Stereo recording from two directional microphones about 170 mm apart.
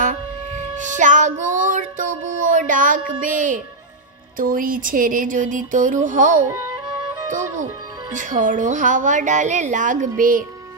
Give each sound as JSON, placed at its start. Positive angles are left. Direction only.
{"t": 0.8, "sound": "music", "side_deg": -45}
{"t": 3.2, "sound": "speech", "side_deg": -50}